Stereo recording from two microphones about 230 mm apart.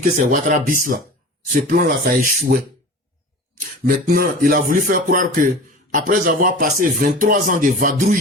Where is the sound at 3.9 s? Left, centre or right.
Right.